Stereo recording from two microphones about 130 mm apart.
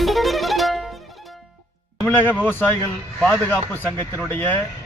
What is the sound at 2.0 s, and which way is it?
Speech, 20° left (ahead or behind).